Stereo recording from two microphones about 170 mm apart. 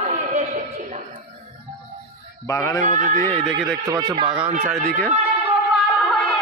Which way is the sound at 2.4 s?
20° left (ahead or behind).